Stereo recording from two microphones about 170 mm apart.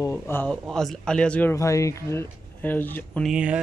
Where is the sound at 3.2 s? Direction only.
5° right (ahead or behind).